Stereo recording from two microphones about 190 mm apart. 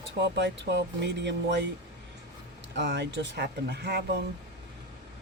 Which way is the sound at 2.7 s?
65° right (ahead or behind).